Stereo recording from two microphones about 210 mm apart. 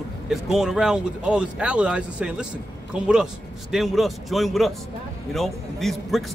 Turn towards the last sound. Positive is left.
turn(degrees=0)  # may be behind; listen again after turning